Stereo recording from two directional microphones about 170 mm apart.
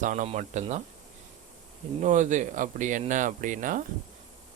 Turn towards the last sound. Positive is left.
turn(degrees=-50)  # may be behind; listen again after turning